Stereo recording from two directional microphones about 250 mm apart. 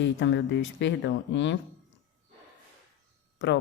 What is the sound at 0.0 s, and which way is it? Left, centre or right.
A woman's voice, left.